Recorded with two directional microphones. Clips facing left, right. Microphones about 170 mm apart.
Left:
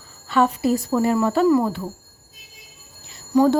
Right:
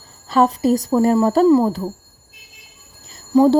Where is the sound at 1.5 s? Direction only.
25° right (ahead or behind).